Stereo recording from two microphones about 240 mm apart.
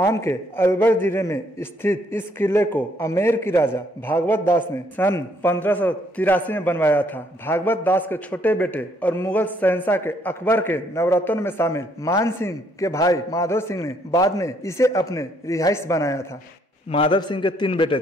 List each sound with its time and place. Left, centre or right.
0.0 s a man's voice: centre